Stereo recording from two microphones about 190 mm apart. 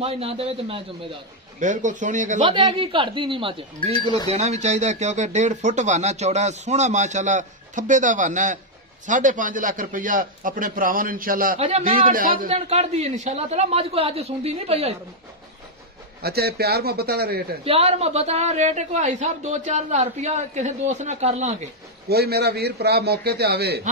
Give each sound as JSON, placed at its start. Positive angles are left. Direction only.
{"t": 0.0, "sound": "speech", "side_deg": -30}
{"t": 1.6, "sound": "speech", "side_deg": -40}
{"t": 2.4, "sound": "a man's voice", "side_deg": -25}
{"t": 11.5, "sound": "speech", "side_deg": -30}
{"t": 11.8, "sound": "a man's voice", "side_deg": -50}
{"t": 12.4, "sound": "speech", "side_deg": -35}
{"t": 16.2, "sound": "a man's voice", "side_deg": -55}
{"t": 17.6, "sound": "speech", "side_deg": -30}
{"t": 22.1, "sound": "a man's voice", "side_deg": -55}